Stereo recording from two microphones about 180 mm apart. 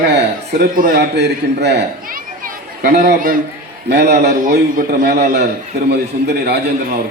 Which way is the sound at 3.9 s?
65° right (ahead or behind).